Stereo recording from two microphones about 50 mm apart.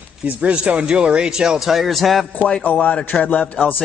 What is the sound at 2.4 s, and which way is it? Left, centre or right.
Speech, centre.